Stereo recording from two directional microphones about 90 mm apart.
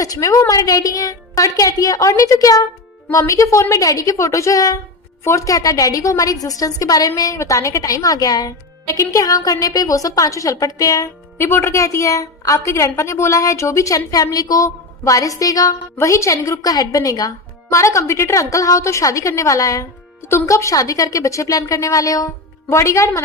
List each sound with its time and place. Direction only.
0.0 s speech: 40° left (ahead or behind)
11.3 s speech: 25° left (ahead or behind)